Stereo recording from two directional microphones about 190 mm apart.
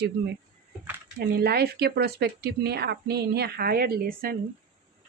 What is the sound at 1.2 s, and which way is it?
Speech, 55° right (ahead or behind).